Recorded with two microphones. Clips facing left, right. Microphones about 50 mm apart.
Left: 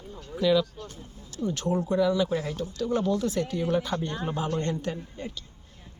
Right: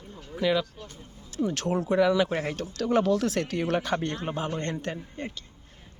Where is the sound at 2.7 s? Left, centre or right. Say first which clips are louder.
Right 3 dB; right.